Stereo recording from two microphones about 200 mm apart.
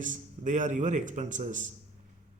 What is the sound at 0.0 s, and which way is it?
A man's voice, 40° right (ahead or behind).